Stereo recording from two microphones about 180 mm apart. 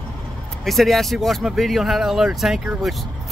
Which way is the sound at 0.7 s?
Centre (ahead or behind).